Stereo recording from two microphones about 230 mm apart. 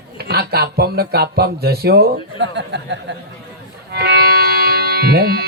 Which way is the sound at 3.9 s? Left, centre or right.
Right.